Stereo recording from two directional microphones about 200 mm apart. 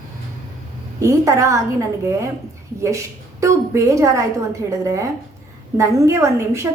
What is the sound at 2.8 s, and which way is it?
A woman's voice, 15° right (ahead or behind).